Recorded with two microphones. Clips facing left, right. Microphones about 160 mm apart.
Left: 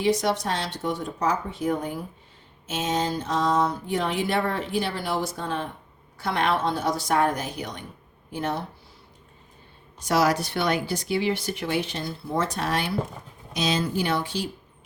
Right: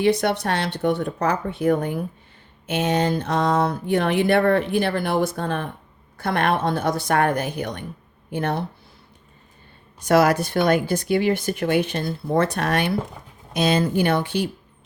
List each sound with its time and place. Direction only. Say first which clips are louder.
0.0 s speech: right 3 dB; 60° right (ahead or behind)
10.0 s speech: right 5 dB; 55° right (ahead or behind)